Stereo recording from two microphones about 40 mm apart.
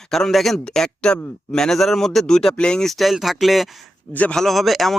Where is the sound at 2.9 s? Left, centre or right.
Centre.